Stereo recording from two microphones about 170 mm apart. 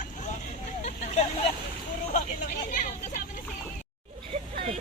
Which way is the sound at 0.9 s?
40° left (ahead or behind).